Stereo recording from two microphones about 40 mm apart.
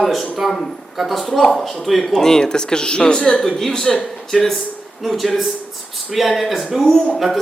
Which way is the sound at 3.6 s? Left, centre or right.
Centre.